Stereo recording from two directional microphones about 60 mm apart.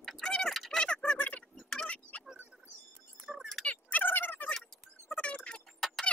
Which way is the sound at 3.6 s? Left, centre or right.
Left.